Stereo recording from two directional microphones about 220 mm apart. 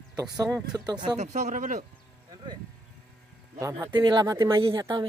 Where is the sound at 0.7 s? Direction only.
15° right (ahead or behind).